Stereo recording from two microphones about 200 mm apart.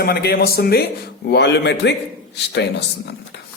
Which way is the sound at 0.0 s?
50° left (ahead or behind).